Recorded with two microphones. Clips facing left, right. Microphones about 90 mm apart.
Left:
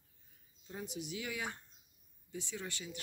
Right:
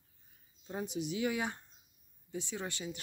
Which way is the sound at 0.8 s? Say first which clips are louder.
Right 8 dB; 25° right (ahead or behind).